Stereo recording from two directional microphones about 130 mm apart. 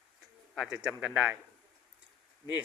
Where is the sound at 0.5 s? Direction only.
5° right (ahead or behind).